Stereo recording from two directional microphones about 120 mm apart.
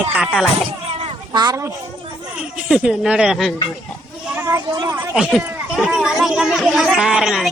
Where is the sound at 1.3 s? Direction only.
35° right (ahead or behind).